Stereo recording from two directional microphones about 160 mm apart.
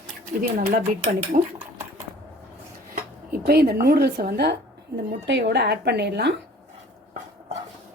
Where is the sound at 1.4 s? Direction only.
45° right (ahead or behind).